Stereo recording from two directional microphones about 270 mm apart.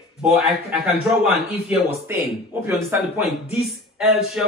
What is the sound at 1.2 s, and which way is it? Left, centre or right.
A man's voice, centre.